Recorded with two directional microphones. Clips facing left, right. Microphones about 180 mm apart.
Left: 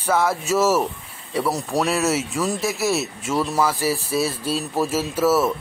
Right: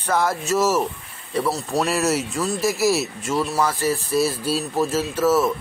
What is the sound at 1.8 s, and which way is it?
Speech, centre (ahead or behind).